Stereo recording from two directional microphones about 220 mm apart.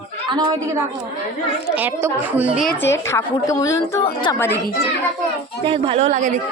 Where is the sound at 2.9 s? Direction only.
10° left (ahead or behind).